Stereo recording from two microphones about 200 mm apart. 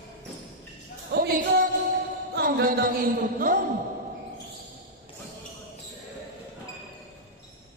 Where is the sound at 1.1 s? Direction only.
45° right (ahead or behind).